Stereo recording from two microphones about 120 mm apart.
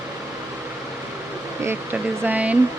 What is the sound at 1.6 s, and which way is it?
Speech, 15° right (ahead or behind).